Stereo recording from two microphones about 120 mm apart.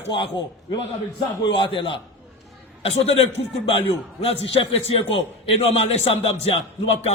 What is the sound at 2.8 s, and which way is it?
A man's voice, 55° left (ahead or behind).